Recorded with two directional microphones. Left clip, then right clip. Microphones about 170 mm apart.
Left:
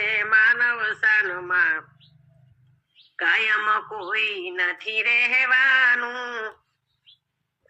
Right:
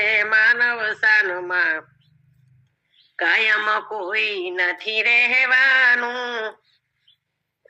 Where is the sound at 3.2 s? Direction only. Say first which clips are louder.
Right 3 dB; 50° right (ahead or behind).